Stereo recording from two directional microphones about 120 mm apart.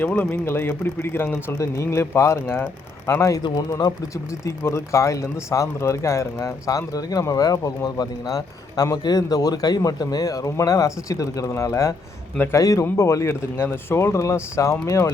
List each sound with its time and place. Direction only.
0.0 s speech: 15° left (ahead or behind)